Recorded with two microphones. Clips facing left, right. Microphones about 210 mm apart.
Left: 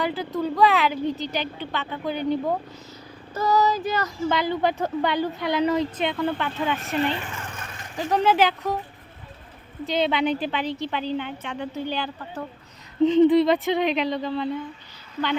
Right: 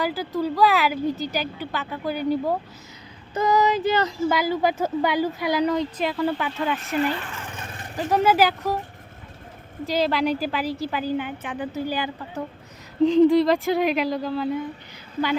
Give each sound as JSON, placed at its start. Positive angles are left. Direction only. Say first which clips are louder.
{"t": 0.0, "sound": "a woman's voice", "louder": "right 1 dB", "side_deg": 0}
{"t": 3.3, "sound": "child singing", "louder": "right 1 dB", "side_deg": -15}
{"t": 4.3, "sound": "a woman's voice", "louder": "left 1 dB", "side_deg": -5}
{"t": 9.8, "sound": "a woman's voice", "louder": "right 1 dB", "side_deg": 0}